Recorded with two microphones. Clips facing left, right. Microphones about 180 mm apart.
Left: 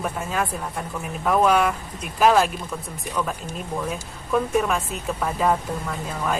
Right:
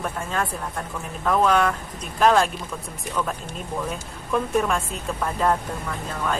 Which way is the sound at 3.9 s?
5° left (ahead or behind).